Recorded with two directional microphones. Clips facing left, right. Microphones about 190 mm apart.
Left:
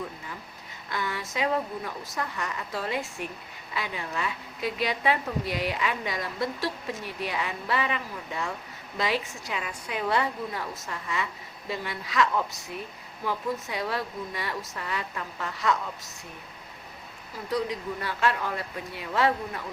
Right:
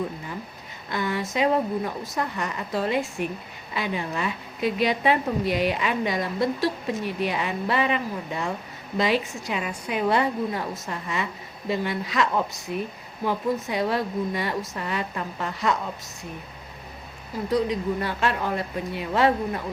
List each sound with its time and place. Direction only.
0.9 s a woman's voice: 20° right (ahead or behind)
17.5 s a woman's voice: 20° right (ahead or behind)